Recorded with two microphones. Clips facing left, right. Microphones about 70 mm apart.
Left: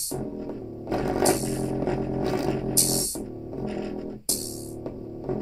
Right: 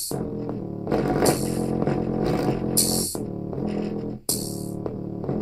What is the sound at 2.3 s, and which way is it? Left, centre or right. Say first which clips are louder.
Music: right 2 dB; right.